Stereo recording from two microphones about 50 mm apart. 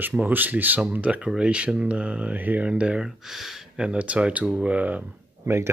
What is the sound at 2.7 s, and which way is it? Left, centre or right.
Speech, centre.